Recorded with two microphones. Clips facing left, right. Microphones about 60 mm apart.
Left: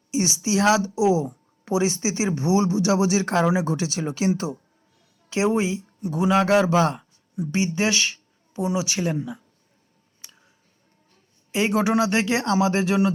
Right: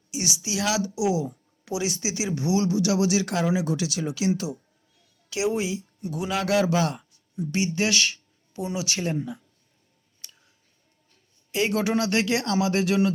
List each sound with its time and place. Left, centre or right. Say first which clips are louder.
0.1 s a woman's voice: left 7 dB; left
10.2 s music: left 1 dB; left
11.5 s speech: left 3 dB; left